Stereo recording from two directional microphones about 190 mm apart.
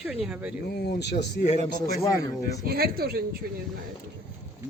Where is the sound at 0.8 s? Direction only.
60° left (ahead or behind).